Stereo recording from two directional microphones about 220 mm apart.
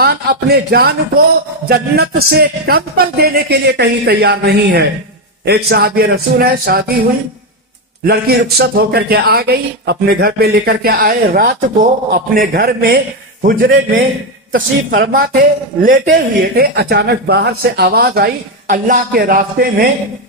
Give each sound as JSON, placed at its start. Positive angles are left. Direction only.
{"t": 0.0, "sound": "a man's voice", "side_deg": -45}
{"t": 8.0, "sound": "a man's voice", "side_deg": -45}